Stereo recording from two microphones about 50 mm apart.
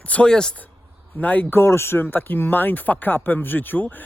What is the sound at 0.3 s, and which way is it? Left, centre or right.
Speech, centre.